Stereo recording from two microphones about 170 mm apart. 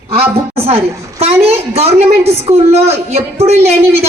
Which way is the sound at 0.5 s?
35° right (ahead or behind).